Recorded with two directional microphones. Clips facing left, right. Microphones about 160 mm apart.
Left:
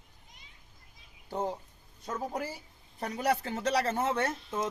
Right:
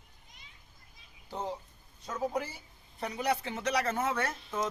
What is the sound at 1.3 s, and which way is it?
Speech, 45° left (ahead or behind).